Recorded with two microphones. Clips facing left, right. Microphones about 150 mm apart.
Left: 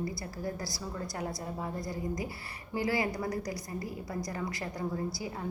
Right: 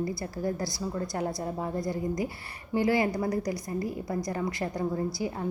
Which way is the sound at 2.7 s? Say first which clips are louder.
Right 6 dB; 25° right (ahead or behind).